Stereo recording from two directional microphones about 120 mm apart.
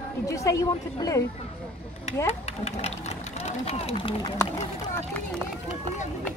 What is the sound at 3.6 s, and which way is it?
Speech, 55° left (ahead or behind).